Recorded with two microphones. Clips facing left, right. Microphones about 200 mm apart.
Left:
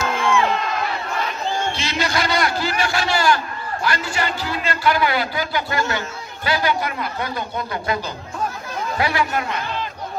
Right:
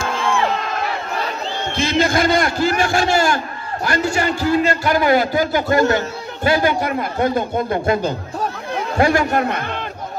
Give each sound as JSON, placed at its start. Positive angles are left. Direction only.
{"t": 1.7, "sound": "a man's voice", "side_deg": -50}